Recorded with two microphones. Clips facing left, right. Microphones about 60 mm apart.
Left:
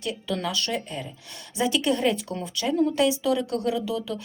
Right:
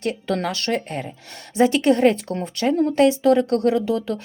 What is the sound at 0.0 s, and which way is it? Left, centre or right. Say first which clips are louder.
Speech: right 5 dB; right.